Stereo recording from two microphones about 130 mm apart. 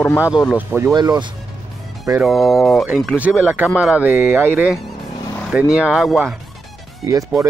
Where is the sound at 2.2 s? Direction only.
Centre (ahead or behind).